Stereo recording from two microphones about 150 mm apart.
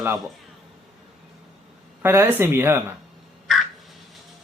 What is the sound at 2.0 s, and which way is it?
Speech, 15° right (ahead or behind).